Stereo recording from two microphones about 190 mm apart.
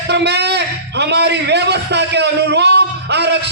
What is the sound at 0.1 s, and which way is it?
A man's voice, 60° right (ahead or behind).